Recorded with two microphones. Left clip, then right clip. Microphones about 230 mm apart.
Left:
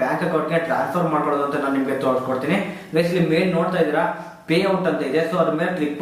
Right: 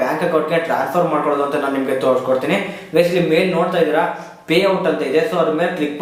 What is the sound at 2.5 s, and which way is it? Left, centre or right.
Speech, centre.